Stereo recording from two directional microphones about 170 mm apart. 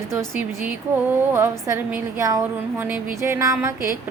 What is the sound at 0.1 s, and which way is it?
A woman's voice, 10° right (ahead or behind).